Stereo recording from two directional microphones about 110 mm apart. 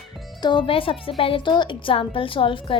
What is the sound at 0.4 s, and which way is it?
A woman's voice, 50° left (ahead or behind).